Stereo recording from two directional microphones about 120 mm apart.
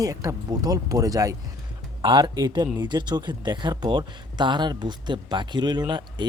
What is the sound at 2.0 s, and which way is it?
Speech, 40° right (ahead or behind).